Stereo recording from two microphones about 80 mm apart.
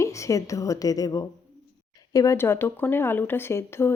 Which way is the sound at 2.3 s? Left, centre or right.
Left.